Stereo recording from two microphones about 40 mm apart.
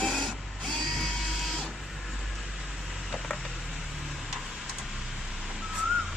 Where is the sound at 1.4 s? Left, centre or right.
Centre.